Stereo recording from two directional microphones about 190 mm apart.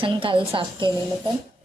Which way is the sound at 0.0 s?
25° right (ahead or behind).